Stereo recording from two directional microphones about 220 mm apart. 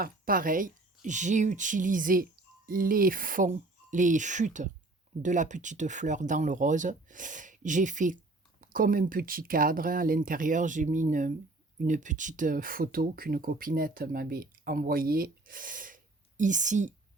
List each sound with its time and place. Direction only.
0.0 s speech: 40° right (ahead or behind)